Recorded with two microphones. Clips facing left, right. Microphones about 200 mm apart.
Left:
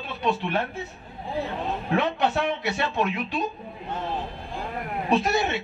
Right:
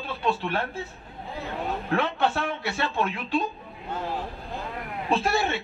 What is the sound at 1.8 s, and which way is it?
A man's voice, 20° left (ahead or behind).